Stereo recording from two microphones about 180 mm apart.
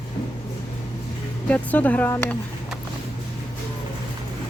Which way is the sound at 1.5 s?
10° left (ahead or behind).